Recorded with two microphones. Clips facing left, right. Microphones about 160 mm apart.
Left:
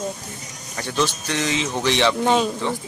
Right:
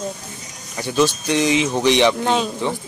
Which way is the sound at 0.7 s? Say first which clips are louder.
Right 5 dB; 15° right (ahead or behind).